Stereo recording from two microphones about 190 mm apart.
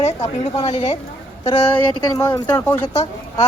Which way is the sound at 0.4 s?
30° left (ahead or behind).